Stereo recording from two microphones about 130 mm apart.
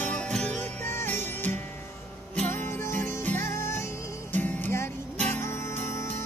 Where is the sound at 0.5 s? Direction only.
20° left (ahead or behind).